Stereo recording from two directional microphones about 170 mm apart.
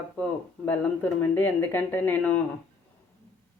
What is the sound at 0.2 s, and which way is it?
Speech, 10° left (ahead or behind).